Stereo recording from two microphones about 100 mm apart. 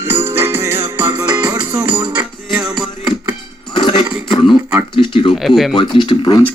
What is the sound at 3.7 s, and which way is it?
Music, 50° left (ahead or behind).